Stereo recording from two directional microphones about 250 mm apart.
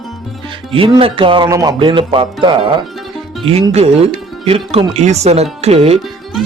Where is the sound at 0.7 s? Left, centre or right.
Right.